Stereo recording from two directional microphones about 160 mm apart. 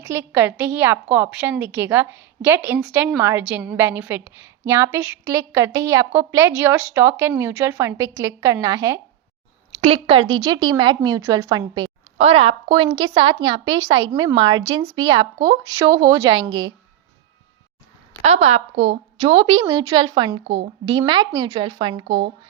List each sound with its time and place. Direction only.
0.0 s a woman's voice: 15° right (ahead or behind)
9.7 s speech: 40° right (ahead or behind)
12.1 s a woman's voice: 40° right (ahead or behind)
18.2 s a woman's voice: 40° right (ahead or behind)